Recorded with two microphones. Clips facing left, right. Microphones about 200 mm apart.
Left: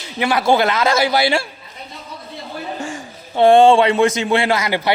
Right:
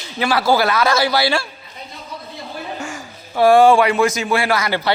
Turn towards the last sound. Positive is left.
turn(degrees=20)  # may be behind; listen again after turning